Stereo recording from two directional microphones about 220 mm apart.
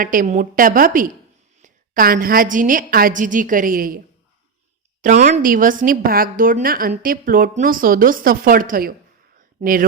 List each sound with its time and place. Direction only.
0.0 s a woman's voice: 40° right (ahead or behind)
5.0 s a woman's voice: 35° right (ahead or behind)